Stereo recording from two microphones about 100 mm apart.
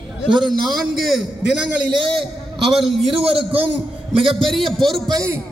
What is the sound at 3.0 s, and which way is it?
Speech, 65° right (ahead or behind).